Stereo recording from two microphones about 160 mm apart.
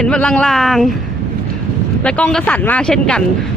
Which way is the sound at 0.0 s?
5° left (ahead or behind).